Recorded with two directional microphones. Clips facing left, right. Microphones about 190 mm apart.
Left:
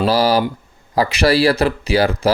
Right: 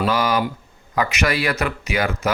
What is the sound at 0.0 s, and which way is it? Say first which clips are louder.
Speech: left 5 dB; 35° left (ahead or behind).